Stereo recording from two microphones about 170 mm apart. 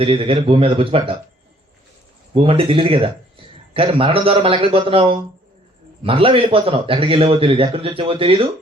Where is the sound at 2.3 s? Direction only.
30° right (ahead or behind).